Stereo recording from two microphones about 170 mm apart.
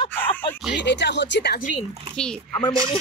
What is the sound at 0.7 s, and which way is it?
Speech, 90° left.